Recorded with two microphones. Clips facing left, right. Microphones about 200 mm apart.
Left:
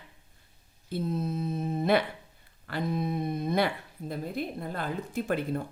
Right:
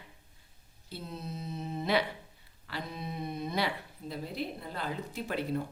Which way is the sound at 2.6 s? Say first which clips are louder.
Left 9 dB; 50° left (ahead or behind).